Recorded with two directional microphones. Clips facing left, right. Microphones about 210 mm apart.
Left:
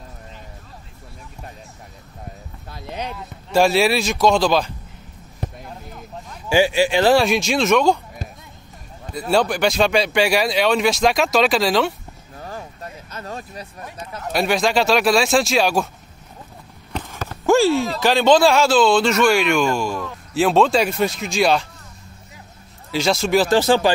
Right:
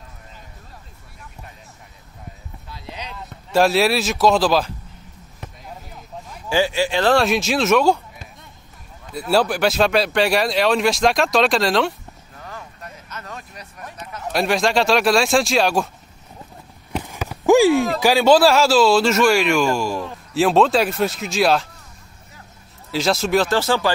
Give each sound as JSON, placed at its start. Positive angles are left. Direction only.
{"t": 2.7, "sound": "a sound", "side_deg": 55}
{"t": 3.2, "sound": "speech", "side_deg": 0}
{"t": 5.4, "sound": "a sound", "side_deg": 35}
{"t": 6.5, "sound": "speech", "side_deg": 15}
{"t": 7.2, "sound": "speech", "side_deg": 0}
{"t": 9.3, "sound": "speech", "side_deg": -5}
{"t": 12.4, "sound": "vehicle", "side_deg": 35}
{"t": 14.2, "sound": "speech", "side_deg": 0}
{"t": 16.9, "sound": "a sound", "side_deg": -10}
{"t": 17.9, "sound": "speech", "side_deg": -10}
{"t": 22.8, "sound": "speech", "side_deg": 0}
{"t": 23.5, "sound": "speech", "side_deg": 15}